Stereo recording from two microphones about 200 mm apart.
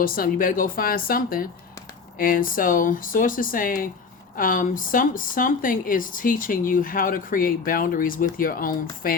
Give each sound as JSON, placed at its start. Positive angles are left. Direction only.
{"t": 0.0, "sound": "speech", "side_deg": 45}